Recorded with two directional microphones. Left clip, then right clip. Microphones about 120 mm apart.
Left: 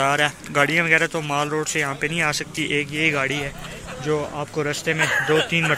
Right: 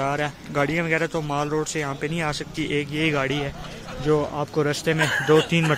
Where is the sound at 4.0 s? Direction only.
45° right (ahead or behind).